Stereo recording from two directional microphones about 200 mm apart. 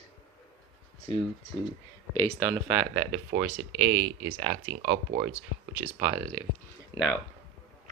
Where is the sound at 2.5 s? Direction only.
5° right (ahead or behind).